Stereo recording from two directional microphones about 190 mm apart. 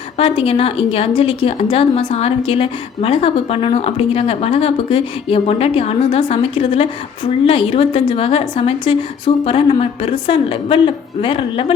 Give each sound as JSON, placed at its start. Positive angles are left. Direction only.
{"t": 0.2, "sound": "a woman's voice", "side_deg": 30}